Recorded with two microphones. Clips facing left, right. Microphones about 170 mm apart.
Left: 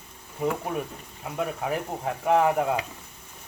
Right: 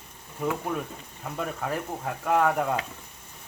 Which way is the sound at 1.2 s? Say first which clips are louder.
Left 2 dB; 5° left (ahead or behind).